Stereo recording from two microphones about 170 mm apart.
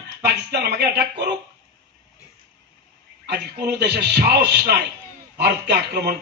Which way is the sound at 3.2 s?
70° right (ahead or behind).